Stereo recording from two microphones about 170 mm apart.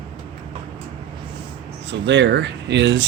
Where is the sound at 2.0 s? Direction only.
90° right.